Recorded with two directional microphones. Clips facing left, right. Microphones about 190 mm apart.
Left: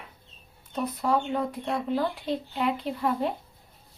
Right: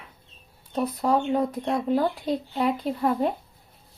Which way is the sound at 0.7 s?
35° right (ahead or behind).